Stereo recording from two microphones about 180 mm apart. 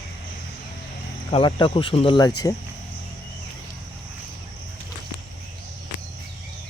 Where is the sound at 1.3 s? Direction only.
30° left (ahead or behind).